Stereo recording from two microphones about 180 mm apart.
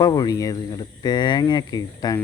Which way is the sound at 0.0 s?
20° left (ahead or behind).